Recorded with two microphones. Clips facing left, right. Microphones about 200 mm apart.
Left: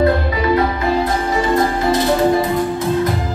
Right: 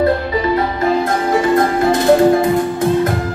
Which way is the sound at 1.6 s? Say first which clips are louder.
Right 2 dB; 50° right (ahead or behind).